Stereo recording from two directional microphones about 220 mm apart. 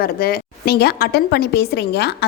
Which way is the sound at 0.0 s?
45° left (ahead or behind).